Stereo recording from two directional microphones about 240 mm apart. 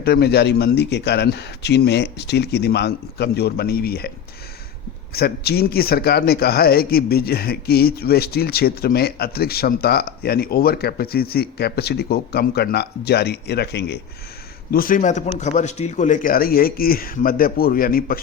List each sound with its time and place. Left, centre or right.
0.0 s speech: left
5.1 s a man's voice: left